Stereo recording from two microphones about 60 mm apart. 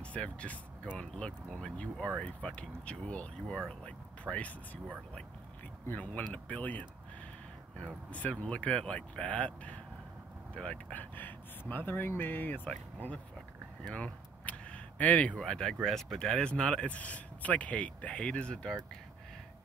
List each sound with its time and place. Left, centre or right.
0.0 s speech: centre
12.6 s speech: left
13.9 s a sound: left
15.4 s speech: centre